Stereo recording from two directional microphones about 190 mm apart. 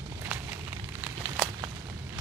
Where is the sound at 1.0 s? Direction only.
10° right (ahead or behind).